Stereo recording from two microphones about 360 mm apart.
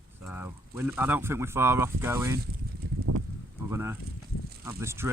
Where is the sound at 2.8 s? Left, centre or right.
Right.